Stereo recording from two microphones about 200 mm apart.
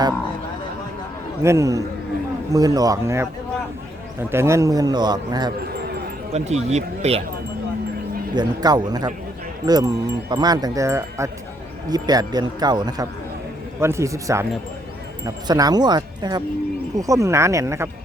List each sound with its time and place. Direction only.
1.4 s speech: 15° right (ahead or behind)
6.3 s speech: 35° right (ahead or behind)
8.4 s speech: 20° right (ahead or behind)
15.4 s speech: 20° right (ahead or behind)